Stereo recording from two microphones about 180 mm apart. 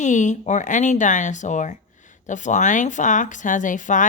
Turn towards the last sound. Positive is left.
turn(degrees=45)  # may be behind; listen again after turning